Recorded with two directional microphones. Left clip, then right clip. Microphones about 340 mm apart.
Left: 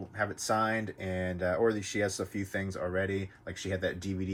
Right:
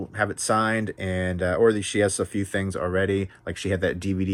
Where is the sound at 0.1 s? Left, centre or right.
Centre.